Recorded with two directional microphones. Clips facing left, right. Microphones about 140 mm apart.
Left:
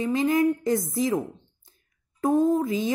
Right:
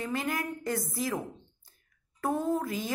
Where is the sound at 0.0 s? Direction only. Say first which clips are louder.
Left 11 dB; 20° left (ahead or behind).